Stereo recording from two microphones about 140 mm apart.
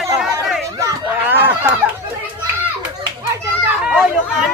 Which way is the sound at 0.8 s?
20° right (ahead or behind).